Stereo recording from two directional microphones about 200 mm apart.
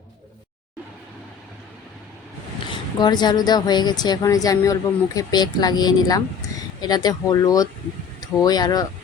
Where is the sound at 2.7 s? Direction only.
20° left (ahead or behind).